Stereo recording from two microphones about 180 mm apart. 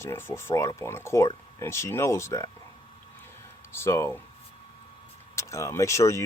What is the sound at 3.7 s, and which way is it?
Speech, 15° left (ahead or behind).